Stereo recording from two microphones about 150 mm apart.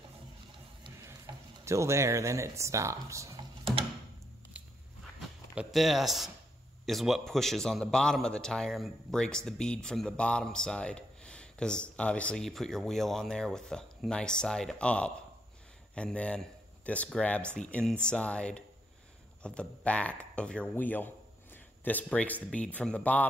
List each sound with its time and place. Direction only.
1.3 s a sound: 30° right (ahead or behind)
1.6 s speech: 20° right (ahead or behind)
4.6 s walk: 10° right (ahead or behind)
5.5 s a man's voice: 5° right (ahead or behind)